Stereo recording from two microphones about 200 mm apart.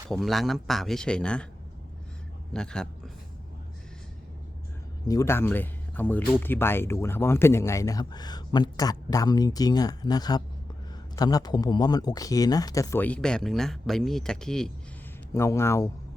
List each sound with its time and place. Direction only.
0.1 s speech: centre (ahead or behind)
2.5 s speech: 5° left (ahead or behind)
5.0 s speech: 15° left (ahead or behind)
15.3 s speech: 15° left (ahead or behind)